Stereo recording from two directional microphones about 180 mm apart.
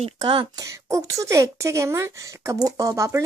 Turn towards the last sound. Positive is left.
turn(degrees=-15)  # may be behind; listen again after turning